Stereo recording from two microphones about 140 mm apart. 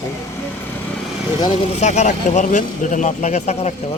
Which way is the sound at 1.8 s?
55° left (ahead or behind).